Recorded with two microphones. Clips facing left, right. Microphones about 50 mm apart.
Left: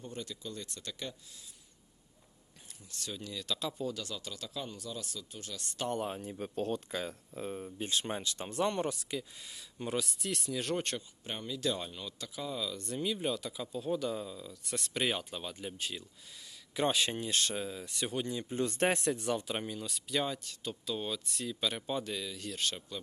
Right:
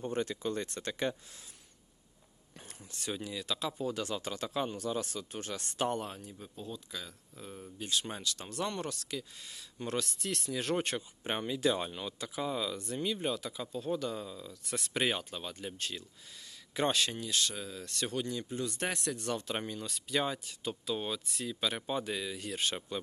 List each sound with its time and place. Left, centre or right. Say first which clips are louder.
0.0 s speech: right 8 dB; right
2.9 s speech: right 3 dB; right
3.9 s speech: right 5 dB; right
6.1 s speech: left 6 dB; left
6.6 s speech: left 9 dB; left
6.9 s speech: left 7 dB; left; by 9.2 s centre
9.4 s speech: even; centre
11.2 s speech: right 5 dB; right
11.6 s speech: right 3 dB; centre
12.8 s speech: even; centre
17.2 s speech: left 1 dB; left
17.7 s speech: even; centre
18.5 s speech: left 7 dB; left
19.2 s speech: left 1 dB; centre; by 23.0 s right